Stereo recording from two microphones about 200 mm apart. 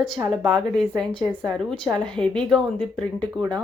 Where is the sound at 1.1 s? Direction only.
25° right (ahead or behind).